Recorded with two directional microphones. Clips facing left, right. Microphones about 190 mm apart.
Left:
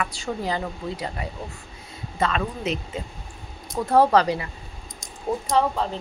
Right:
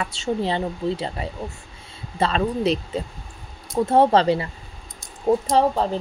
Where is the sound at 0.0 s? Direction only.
25° right (ahead or behind).